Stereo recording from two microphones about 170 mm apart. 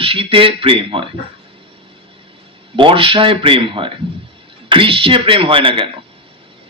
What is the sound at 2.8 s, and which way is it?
A man's voice, 30° right (ahead or behind).